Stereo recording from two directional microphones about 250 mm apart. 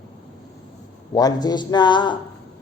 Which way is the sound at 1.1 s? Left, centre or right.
Centre.